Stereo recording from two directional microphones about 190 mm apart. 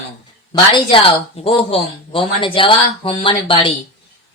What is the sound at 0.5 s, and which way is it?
A woman's voice, 25° left (ahead or behind).